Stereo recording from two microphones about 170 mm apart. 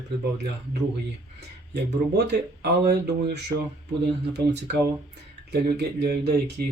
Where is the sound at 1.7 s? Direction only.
75° right (ahead or behind).